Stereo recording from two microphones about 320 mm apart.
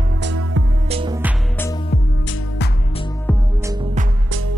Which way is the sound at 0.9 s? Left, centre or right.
Centre.